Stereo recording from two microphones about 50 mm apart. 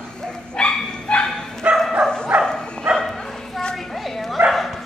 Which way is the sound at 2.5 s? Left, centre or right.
Centre.